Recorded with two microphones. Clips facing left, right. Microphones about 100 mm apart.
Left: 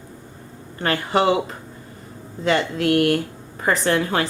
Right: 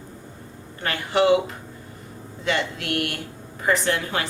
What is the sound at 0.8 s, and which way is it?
Speech, 35° left (ahead or behind).